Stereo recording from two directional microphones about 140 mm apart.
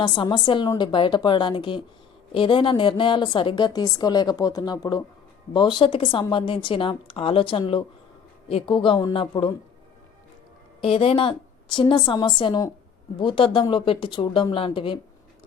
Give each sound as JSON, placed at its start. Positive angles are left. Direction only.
{"t": 0.0, "sound": "a woman's voice", "side_deg": 35}
{"t": 10.8, "sound": "a woman's voice", "side_deg": 40}